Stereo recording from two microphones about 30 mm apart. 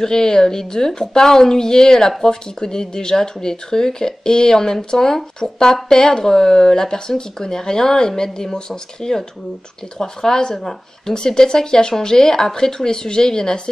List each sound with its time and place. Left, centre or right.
0.0 s a woman's voice: left
11.1 s a woman's voice: left